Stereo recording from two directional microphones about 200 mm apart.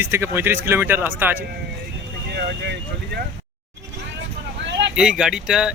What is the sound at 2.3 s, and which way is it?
Speech, 55° right (ahead or behind).